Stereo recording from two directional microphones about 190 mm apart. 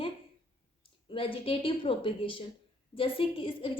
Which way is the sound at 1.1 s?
30° left (ahead or behind).